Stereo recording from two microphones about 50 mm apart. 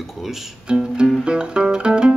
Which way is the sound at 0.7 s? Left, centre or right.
Centre.